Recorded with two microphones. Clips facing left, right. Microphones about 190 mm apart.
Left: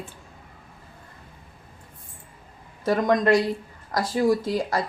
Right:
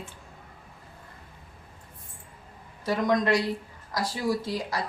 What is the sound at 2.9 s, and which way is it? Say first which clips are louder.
Speech: left 4 dB; 50° left (ahead or behind).